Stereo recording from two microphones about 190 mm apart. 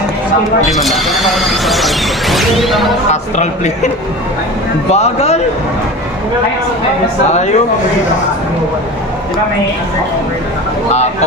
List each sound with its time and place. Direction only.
0.7 s speech: centre (ahead or behind)
3.1 s a man's voice: 40° left (ahead or behind)
4.9 s a man's voice: 35° left (ahead or behind)
7.3 s a man's voice: 35° left (ahead or behind)